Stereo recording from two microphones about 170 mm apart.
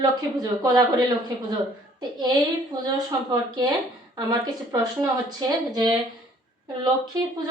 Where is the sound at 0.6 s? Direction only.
25° right (ahead or behind).